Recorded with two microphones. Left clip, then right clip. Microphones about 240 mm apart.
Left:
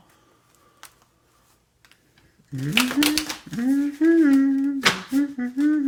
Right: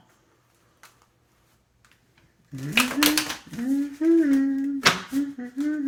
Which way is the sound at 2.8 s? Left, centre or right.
Centre.